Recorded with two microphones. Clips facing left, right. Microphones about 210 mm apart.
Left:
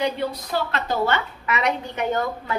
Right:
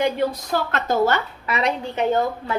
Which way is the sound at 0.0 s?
50° right (ahead or behind).